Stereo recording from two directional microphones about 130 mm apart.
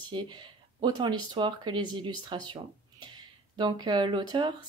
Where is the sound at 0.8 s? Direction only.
35° right (ahead or behind).